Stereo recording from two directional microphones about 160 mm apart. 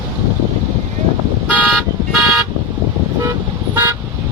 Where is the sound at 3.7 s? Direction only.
15° right (ahead or behind).